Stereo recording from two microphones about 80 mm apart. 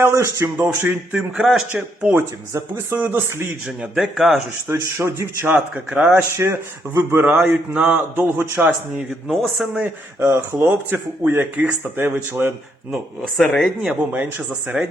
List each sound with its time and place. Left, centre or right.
0.0 s speech: right
0.6 s speech: right
2.1 s speech: right
3.0 s speech: right
3.9 s speech: centre
4.7 s speech: right
5.5 s speech: centre
6.3 s speech: right
7.3 s speech: centre
9.8 s speech: right
13.3 s speech: centre
14.7 s speech: right